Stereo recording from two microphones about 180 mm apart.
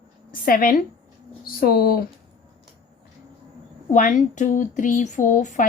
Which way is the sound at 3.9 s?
45° left (ahead or behind).